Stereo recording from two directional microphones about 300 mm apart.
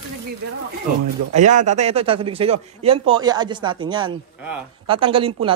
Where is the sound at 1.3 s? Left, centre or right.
Right.